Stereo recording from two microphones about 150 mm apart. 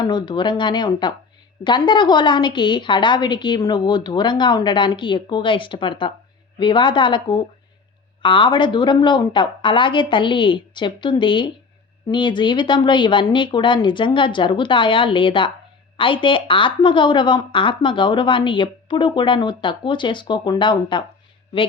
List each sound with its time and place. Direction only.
0.0 s a woman's voice: 30° left (ahead or behind)